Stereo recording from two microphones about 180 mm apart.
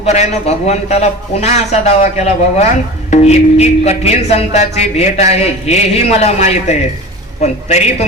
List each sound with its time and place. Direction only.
0.0 s speech: 35° left (ahead or behind)